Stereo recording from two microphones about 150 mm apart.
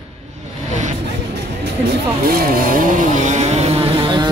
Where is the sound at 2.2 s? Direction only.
80° right.